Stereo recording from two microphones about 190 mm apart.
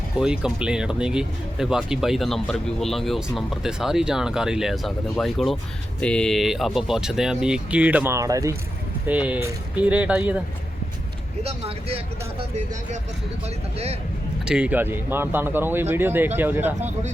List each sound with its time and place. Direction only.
0.2 s speech: 5° right (ahead or behind)
11.4 s speech: 30° right (ahead or behind)
14.4 s speech: 5° right (ahead or behind)